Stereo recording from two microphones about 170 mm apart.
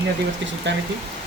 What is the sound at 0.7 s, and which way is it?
Speech, 90° right.